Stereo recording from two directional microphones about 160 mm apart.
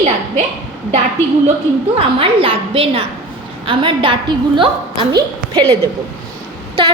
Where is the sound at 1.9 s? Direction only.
35° right (ahead or behind).